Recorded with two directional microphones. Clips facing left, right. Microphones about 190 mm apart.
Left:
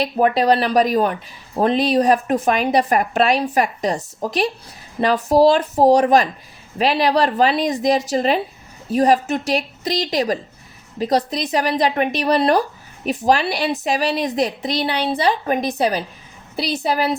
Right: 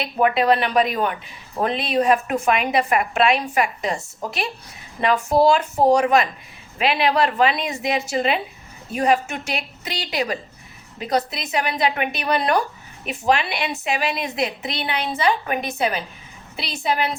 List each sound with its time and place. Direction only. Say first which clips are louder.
0.0 s a woman's voice: left 3 dB; 35° left (ahead or behind)